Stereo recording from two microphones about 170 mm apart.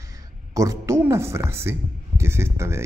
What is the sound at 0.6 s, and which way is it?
Speech, 20° right (ahead or behind).